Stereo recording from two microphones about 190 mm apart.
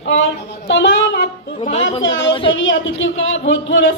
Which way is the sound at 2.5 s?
75° left (ahead or behind).